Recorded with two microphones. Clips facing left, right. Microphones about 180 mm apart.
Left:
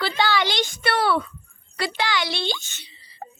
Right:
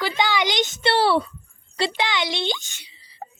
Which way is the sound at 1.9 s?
20° right (ahead or behind).